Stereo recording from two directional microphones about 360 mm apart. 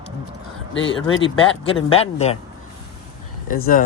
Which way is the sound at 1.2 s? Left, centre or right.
Centre.